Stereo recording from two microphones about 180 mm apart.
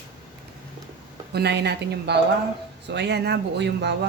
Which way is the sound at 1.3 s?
65° right (ahead or behind).